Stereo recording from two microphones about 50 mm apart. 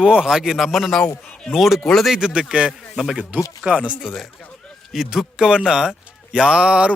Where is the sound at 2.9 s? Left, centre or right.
Centre.